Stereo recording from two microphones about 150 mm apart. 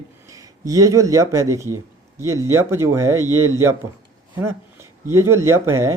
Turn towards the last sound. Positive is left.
turn(degrees=-20)  # may be behind; listen again after turning